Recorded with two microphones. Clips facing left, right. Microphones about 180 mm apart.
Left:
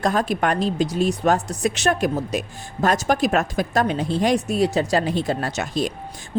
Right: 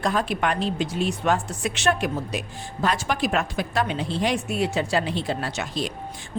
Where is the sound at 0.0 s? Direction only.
45° left (ahead or behind).